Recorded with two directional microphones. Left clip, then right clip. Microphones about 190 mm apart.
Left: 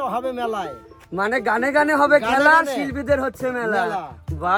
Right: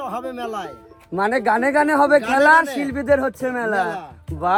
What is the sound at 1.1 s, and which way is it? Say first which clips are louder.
Speech: right 2 dB; 40° right (ahead or behind).